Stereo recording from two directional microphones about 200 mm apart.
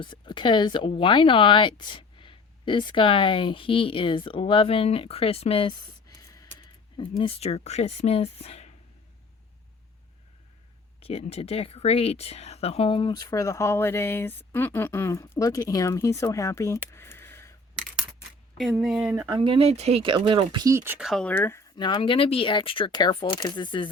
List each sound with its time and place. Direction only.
0.0 s speech: 25° left (ahead or behind)
7.2 s speech: 30° left (ahead or behind)
11.0 s speech: 30° left (ahead or behind); by 17.8 s 10° left (ahead or behind)
18.8 s speech: 5° right (ahead or behind)
19.1 s speech: 20° right (ahead or behind); by 23.9 s 25° left (ahead or behind)